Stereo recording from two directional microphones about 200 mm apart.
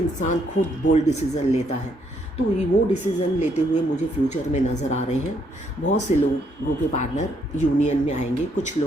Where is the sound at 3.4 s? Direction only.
35° left (ahead or behind).